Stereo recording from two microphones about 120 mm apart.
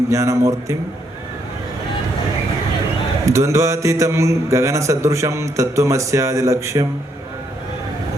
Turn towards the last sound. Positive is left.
turn(degrees=-25)  # may be behind; listen again after turning